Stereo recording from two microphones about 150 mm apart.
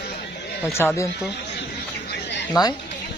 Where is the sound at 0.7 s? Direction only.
15° left (ahead or behind).